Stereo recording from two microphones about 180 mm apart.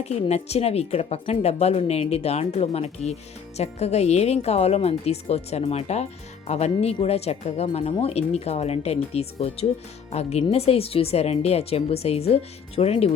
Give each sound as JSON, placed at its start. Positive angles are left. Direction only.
{"t": 0.0, "sound": "speech", "side_deg": 35}